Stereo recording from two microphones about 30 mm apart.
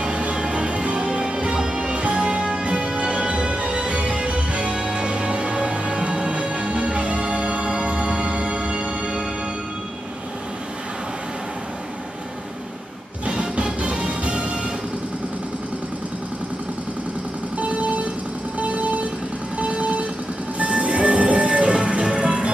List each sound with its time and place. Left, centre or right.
0.0 s music: right
1.5 s music: right
2.0 s music: right
13.3 s music: right
17.6 s vehicle: right
20.5 s music: right